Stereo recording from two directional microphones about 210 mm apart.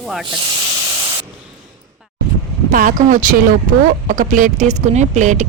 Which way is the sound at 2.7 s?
40° right (ahead or behind).